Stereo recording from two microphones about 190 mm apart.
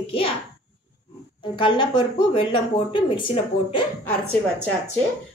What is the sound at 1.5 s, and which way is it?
A woman's voice, 25° left (ahead or behind).